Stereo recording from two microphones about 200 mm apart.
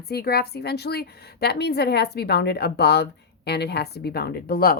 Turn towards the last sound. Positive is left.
turn(degrees=50)  # may be behind; listen again after turning